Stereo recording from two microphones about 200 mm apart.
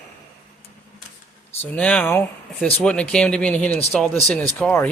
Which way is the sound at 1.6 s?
5° left (ahead or behind).